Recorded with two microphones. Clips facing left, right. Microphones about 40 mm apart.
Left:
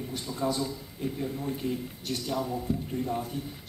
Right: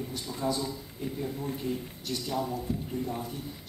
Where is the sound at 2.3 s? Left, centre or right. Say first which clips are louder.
Left 1 dB; centre.